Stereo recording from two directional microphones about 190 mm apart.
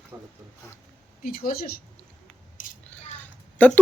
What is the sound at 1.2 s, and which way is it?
Speech, 50° left (ahead or behind).